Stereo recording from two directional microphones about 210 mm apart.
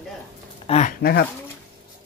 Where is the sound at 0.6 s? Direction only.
30° left (ahead or behind).